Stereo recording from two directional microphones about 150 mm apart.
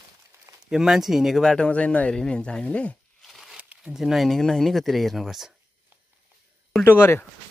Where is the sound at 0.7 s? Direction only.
5° right (ahead or behind).